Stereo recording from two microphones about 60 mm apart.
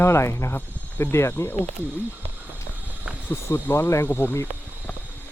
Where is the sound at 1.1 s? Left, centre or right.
Left.